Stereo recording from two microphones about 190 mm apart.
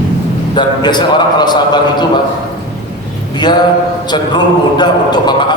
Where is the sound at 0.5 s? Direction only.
25° left (ahead or behind).